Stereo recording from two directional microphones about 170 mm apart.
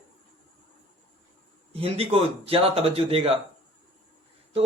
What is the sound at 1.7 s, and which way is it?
A man's voice, 35° right (ahead or behind).